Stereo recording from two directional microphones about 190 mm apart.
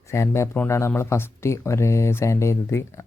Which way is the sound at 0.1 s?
15° left (ahead or behind).